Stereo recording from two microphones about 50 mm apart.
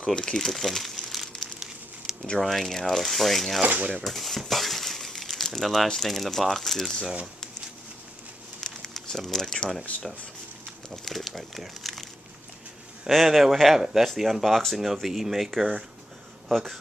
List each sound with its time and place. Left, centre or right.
0.0 s crumpling: centre
2.4 s speech: centre
3.6 s speech: right
4.0 s speech: centre
8.5 s crumpling: centre
11.1 s speech: centre
13.0 s speech: centre